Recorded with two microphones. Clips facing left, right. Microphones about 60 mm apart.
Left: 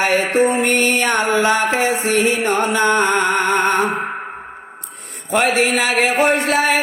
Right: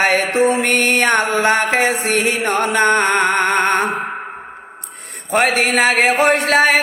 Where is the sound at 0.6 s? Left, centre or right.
Right.